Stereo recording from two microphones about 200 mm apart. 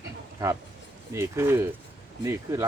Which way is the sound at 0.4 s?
15° right (ahead or behind).